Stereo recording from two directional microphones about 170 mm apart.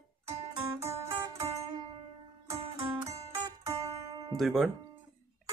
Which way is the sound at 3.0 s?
40° right (ahead or behind).